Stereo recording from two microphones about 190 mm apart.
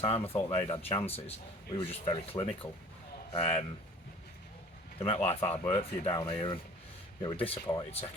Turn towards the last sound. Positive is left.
turn(degrees=30)  # may be behind; listen again after turning